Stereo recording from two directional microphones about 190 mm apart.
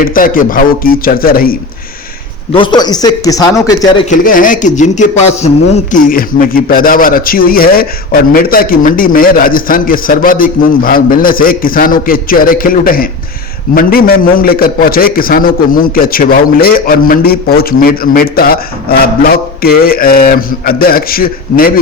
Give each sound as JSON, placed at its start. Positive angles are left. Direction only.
{"t": 0.0, "sound": "a man's voice", "side_deg": 45}
{"t": 2.5, "sound": "a man's voice", "side_deg": 25}
{"t": 4.1, "sound": "a man's voice", "side_deg": 45}